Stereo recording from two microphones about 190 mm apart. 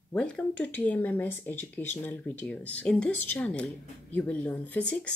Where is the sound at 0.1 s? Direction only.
5° left (ahead or behind).